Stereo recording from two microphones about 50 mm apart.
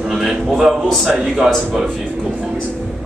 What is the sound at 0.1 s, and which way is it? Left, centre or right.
A man's voice, centre.